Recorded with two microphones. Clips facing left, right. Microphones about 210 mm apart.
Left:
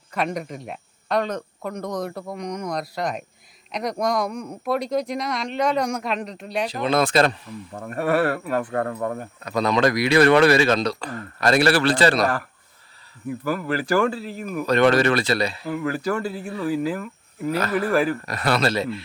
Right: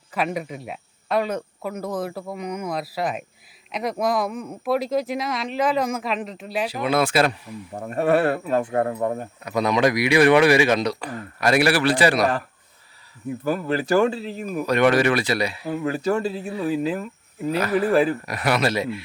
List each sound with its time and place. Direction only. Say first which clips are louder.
0.1 s speech: even; 5° right (ahead or behind)
7.8 s speech: right 2 dB; 25° right (ahead or behind)
13.4 s speech: right 2 dB; 25° right (ahead or behind)
14.7 s speech: left 1 dB; 10° right (ahead or behind)
15.7 s speech: right 4 dB; 25° right (ahead or behind)